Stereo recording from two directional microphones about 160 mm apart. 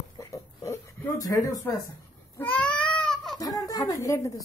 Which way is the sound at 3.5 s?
20° left (ahead or behind).